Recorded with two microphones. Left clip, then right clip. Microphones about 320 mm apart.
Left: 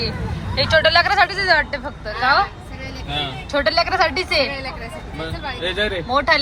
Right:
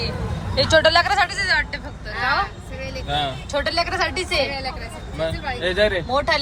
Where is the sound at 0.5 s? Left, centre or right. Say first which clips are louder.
Left 1 dB; centre.